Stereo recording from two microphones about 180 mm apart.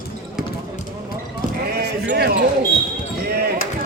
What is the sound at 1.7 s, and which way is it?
Sheep, 60° right (ahead or behind).